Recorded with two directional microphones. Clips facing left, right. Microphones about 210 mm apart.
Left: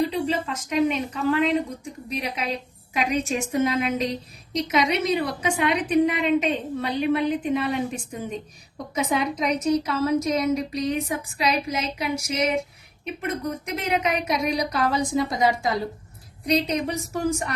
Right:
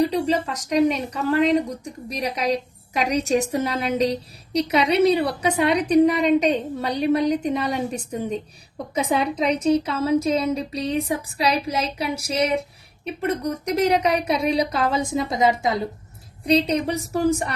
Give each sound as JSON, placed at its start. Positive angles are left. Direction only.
{"t": 0.0, "sound": "a woman's voice", "side_deg": -40}